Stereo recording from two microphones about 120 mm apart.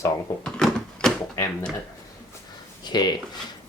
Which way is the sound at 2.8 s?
35° left (ahead or behind).